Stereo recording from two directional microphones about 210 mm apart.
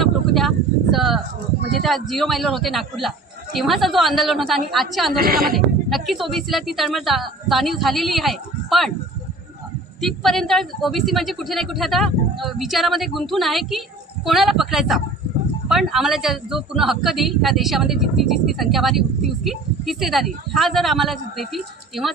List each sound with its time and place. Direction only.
0.0 s a sound: centre (ahead or behind)
0.9 s a woman's voice: centre (ahead or behind)
5.1 s a woman's voice: 45° right (ahead or behind)
5.9 s a woman's voice: centre (ahead or behind)
10.0 s a woman's voice: centre (ahead or behind)